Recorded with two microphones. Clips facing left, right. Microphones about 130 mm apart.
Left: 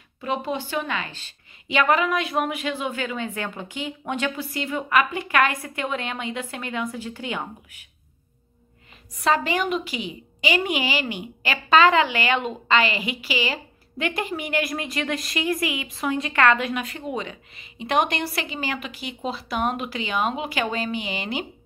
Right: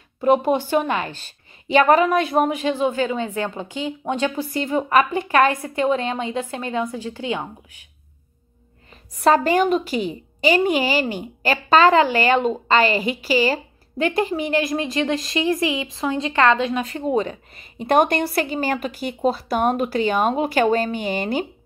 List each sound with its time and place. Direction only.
0.2 s a woman's voice: 45° right (ahead or behind); by 7.4 s 30° right (ahead or behind)
9.2 s a woman's voice: 45° right (ahead or behind)